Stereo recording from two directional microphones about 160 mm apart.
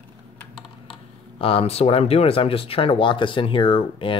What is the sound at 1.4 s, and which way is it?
Speech, 35° left (ahead or behind).